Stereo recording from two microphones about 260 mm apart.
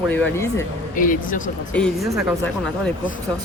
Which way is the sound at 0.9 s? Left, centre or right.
Left.